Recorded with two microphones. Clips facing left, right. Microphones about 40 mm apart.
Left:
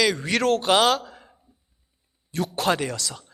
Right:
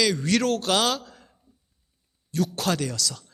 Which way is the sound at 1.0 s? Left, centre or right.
Centre.